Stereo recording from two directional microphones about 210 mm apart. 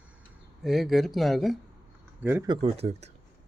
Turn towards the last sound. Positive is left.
turn(degrees=-30)  # may be behind; listen again after turning